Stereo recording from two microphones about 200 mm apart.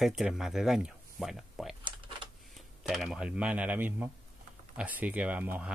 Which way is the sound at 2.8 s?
Centre (ahead or behind).